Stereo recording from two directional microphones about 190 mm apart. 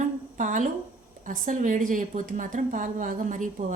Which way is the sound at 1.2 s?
45° right (ahead or behind).